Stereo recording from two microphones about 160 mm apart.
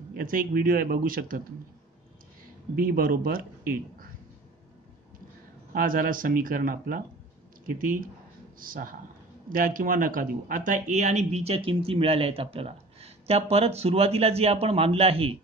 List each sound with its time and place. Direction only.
0.1 s speech: 60° right (ahead or behind)
2.7 s speech: 65° right (ahead or behind)
5.7 s speech: 60° right (ahead or behind); by 15.3 s 35° right (ahead or behind)